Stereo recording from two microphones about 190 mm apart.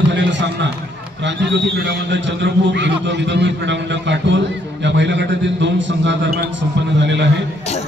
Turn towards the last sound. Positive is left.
turn(degrees=35)  # may be behind; listen again after turning